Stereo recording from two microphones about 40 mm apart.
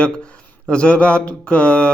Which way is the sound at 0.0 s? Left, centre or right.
Left.